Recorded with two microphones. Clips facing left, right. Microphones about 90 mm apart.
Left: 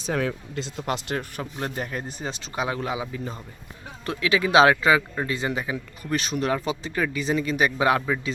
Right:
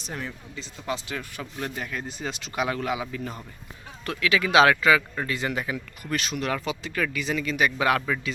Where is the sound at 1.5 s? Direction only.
40° left (ahead or behind).